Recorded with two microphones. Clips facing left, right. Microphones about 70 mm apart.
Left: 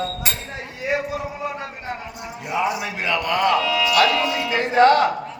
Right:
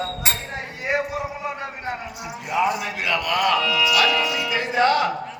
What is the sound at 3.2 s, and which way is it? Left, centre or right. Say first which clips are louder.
Speech: left 2 dB; left.